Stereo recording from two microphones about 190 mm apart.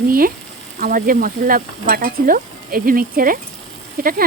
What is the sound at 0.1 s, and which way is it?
Stir, 50° right (ahead or behind).